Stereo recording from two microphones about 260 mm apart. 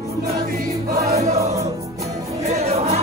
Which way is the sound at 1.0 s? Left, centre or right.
Right.